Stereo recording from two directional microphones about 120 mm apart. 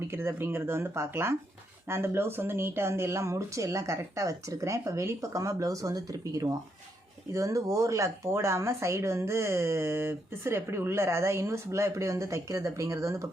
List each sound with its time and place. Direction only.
0.1 s speech: 20° right (ahead or behind)